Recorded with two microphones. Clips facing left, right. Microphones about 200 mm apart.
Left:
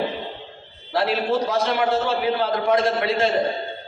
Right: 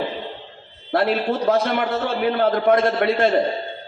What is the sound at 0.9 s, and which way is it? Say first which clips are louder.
A man's voice: right 1 dB; 55° right (ahead or behind).